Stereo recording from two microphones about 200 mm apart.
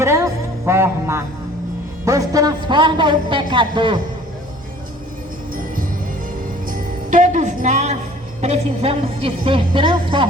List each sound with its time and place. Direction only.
0.0 s music: 15° right (ahead or behind)
2.0 s a woman's voice: 15° right (ahead or behind)
6.7 s music: 40° right (ahead or behind)
8.4 s a woman's voice: 30° right (ahead or behind)